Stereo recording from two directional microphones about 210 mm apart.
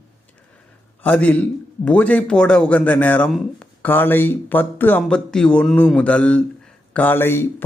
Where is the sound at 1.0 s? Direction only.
5° left (ahead or behind).